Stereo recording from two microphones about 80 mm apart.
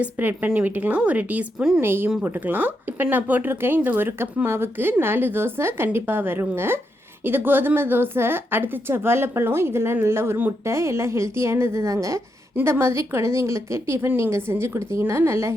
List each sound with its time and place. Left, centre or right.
0.0 s a woman's voice: right
12.5 s a woman's voice: right